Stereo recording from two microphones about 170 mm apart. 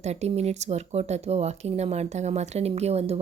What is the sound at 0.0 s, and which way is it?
Speech, 40° right (ahead or behind).